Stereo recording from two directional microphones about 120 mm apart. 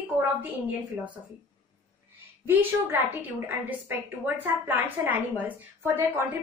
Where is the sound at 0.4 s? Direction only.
15° right (ahead or behind).